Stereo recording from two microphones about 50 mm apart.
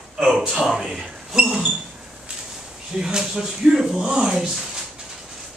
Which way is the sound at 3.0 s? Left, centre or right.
Centre.